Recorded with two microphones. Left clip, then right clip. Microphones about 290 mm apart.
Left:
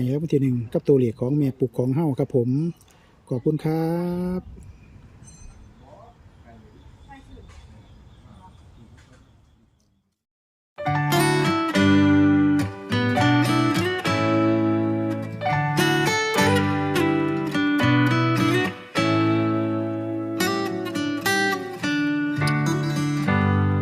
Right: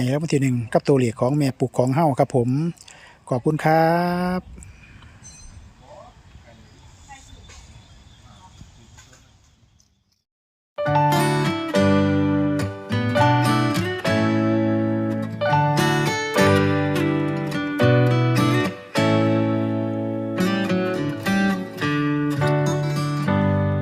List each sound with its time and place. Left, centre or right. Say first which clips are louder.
0.0 s speech: right 1 dB; centre
2.9 s a sound: right 5 dB; centre
3.6 s speech: right 8 dB; centre
10.8 s music: right 3 dB; centre